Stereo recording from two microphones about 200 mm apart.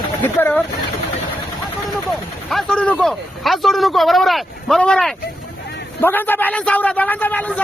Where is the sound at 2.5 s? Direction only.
Centre (ahead or behind).